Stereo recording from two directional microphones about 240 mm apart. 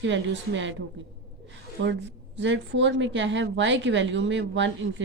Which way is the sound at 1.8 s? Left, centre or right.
Right.